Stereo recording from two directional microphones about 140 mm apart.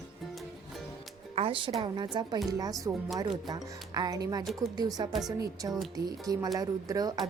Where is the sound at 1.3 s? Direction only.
40° right (ahead or behind).